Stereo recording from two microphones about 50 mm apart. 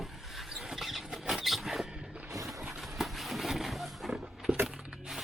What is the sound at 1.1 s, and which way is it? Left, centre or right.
Rodents, centre.